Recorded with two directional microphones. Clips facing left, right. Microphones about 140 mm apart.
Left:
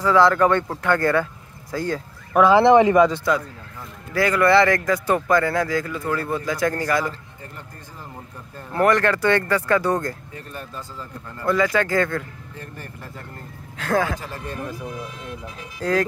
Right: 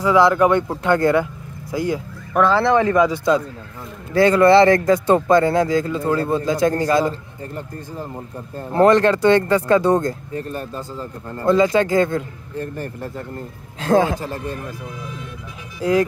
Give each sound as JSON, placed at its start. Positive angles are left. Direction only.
{"t": 0.0, "sound": "speech", "side_deg": -15}
{"t": 2.5, "sound": "speech", "side_deg": 20}
{"t": 3.3, "sound": "speech", "side_deg": -20}
{"t": 8.5, "sound": "speech", "side_deg": -25}
{"t": 10.3, "sound": "speech", "side_deg": -40}
{"t": 11.4, "sound": "speech", "side_deg": -25}
{"t": 12.5, "sound": "speech", "side_deg": -40}
{"t": 13.7, "sound": "speech", "side_deg": -25}
{"t": 15.8, "sound": "speech", "side_deg": -10}